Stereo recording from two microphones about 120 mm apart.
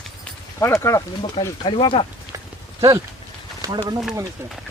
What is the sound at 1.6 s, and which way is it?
Speech, 45° left (ahead or behind).